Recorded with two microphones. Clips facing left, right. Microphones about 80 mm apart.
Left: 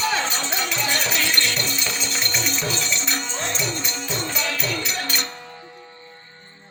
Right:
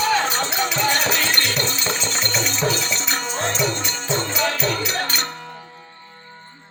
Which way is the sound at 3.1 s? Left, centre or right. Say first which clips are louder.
Right 4 dB; right.